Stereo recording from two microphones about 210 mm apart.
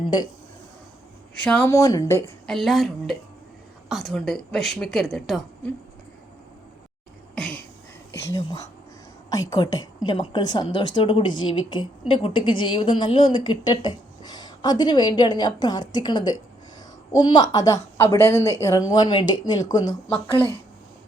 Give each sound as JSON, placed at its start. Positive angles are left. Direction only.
{"t": 1.5, "sound": "a woman's voice", "side_deg": 10}
{"t": 2.5, "sound": "a woman's voice", "side_deg": 0}
{"t": 7.3, "sound": "a sound", "side_deg": 5}
{"t": 9.3, "sound": "a woman's voice", "side_deg": 15}